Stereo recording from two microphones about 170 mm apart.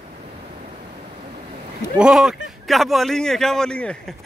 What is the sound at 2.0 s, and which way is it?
Speech, 5° right (ahead or behind).